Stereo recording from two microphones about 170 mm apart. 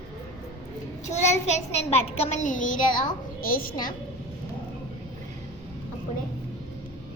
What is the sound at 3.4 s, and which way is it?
Speech, 55° left (ahead or behind).